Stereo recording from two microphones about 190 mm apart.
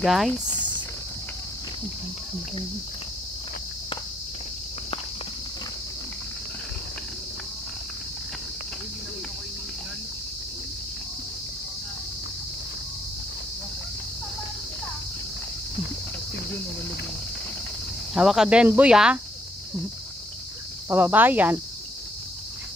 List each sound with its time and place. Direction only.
0.0 s speech: centre (ahead or behind)
18.1 s speech: centre (ahead or behind)
20.9 s speech: 10° right (ahead or behind)